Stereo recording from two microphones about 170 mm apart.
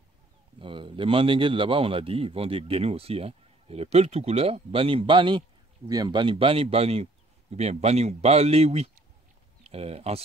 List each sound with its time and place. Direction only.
0.6 s a man's voice: 30° right (ahead or behind)